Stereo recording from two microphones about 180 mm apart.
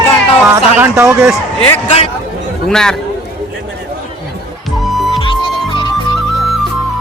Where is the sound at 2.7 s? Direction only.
5° left (ahead or behind).